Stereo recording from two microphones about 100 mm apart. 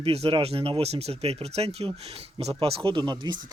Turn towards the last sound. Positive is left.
turn(degrees=-50)  # may be behind; listen again after turning